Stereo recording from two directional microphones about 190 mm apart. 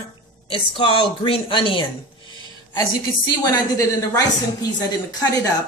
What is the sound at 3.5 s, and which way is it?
A woman's voice, 20° left (ahead or behind).